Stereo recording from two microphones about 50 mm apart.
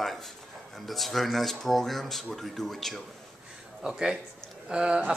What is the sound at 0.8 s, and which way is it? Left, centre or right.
Speech, centre.